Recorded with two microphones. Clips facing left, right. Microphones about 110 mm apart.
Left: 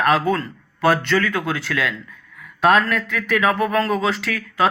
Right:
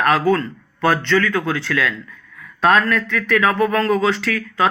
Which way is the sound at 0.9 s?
25° left (ahead or behind).